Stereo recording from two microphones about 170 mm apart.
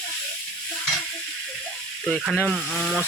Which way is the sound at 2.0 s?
5° left (ahead or behind).